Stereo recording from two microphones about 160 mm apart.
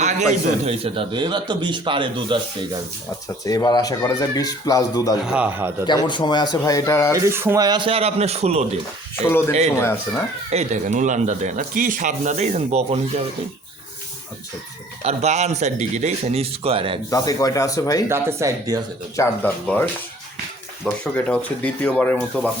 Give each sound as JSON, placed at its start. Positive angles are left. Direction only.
{"t": 0.0, "sound": "a man's voice", "side_deg": -45}
{"t": 3.4, "sound": "speech", "side_deg": 25}
{"t": 5.2, "sound": "a man's voice", "side_deg": -5}
{"t": 5.8, "sound": "speech", "side_deg": 30}
{"t": 7.1, "sound": "a man's voice", "side_deg": -15}
{"t": 9.7, "sound": "speech", "side_deg": 15}
{"t": 10.5, "sound": "speech", "side_deg": -45}
{"t": 15.0, "sound": "speech", "side_deg": -45}
{"t": 17.1, "sound": "speech", "side_deg": 20}
{"t": 18.1, "sound": "speech", "side_deg": -15}
{"t": 19.1, "sound": "speech", "side_deg": 15}